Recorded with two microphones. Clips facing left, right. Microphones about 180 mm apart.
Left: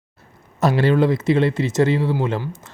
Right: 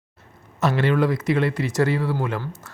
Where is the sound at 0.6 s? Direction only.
35° left (ahead or behind).